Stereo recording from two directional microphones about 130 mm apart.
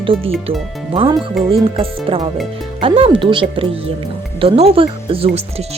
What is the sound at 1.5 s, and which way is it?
Speech, 45° right (ahead or behind).